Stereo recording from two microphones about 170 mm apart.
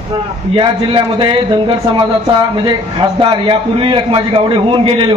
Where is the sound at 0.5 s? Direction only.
30° right (ahead or behind).